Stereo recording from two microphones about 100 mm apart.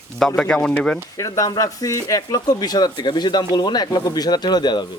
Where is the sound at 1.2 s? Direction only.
35° left (ahead or behind).